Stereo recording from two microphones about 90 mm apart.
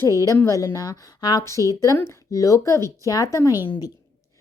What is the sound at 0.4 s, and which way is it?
Speech, 35° left (ahead or behind).